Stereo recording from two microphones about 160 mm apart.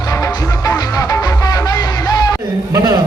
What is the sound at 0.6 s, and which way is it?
Music, 20° left (ahead or behind).